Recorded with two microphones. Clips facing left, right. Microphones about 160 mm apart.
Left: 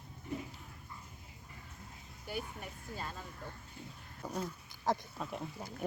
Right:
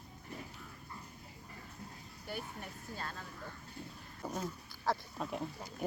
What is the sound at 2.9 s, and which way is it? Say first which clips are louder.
Speech: left 1 dB; 10° left (ahead or behind).